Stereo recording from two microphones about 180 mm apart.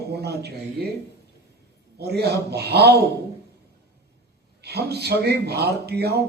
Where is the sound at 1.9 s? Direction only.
65° right (ahead or behind).